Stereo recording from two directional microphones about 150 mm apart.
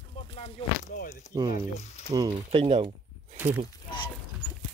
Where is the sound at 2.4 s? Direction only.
45° right (ahead or behind).